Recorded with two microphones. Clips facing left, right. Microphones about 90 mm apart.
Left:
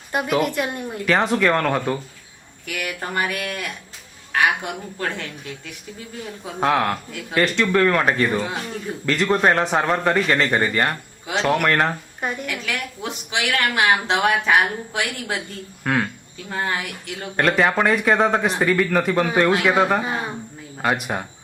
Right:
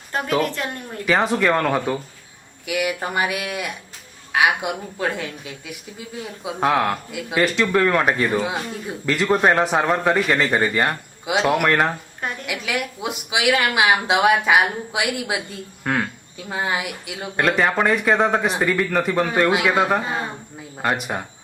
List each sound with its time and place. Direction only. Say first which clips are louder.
0.1 s speech: left 1 dB; 10° left (ahead or behind)
1.0 s a woman's voice: even; centre (ahead or behind)
12.2 s speech: left 3 dB; 10° left (ahead or behind)
12.5 s a woman's voice: right 2 dB; 10° right (ahead or behind)